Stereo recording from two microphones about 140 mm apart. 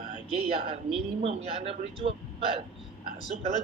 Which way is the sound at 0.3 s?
45° right (ahead or behind).